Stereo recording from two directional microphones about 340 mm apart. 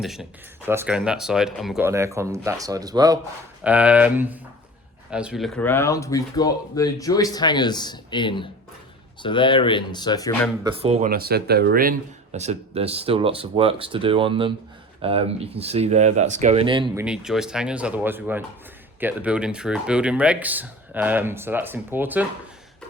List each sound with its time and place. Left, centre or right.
0.0 s speech: centre
10.6 s speech: centre